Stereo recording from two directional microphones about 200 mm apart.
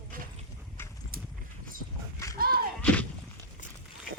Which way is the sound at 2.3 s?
50° right (ahead or behind).